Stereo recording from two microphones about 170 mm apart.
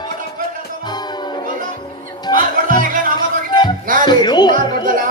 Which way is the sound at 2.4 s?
55° right (ahead or behind).